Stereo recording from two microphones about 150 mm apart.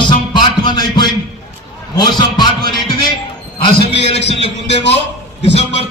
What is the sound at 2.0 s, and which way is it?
Speech, 30° left (ahead or behind).